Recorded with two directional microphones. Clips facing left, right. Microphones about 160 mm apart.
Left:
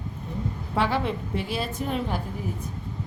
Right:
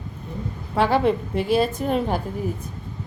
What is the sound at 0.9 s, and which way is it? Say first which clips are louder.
A woman's voice: right 7 dB; 45° right (ahead or behind).